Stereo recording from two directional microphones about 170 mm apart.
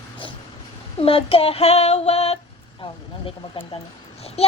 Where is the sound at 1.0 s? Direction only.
35° left (ahead or behind).